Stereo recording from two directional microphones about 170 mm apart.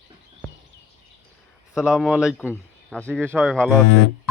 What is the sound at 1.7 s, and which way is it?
Speech, 5° right (ahead or behind).